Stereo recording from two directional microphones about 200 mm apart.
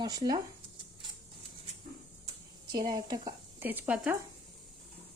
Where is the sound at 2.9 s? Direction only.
20° right (ahead or behind).